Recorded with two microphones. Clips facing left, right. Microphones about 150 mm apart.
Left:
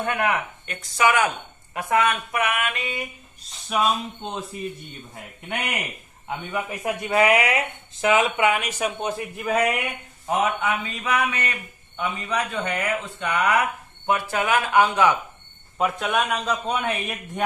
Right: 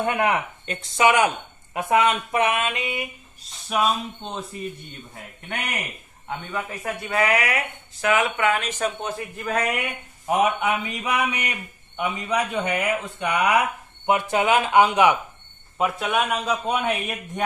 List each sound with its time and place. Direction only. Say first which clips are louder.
0.0 s speech: right 2 dB; 20° right (ahead or behind)
3.7 s a man's voice: even; centre (ahead or behind)
6.2 s speech: left 1 dB; 10° left (ahead or behind)
10.2 s speech: right 2 dB; 15° right (ahead or behind)
15.8 s a man's voice: even; 5° right (ahead or behind)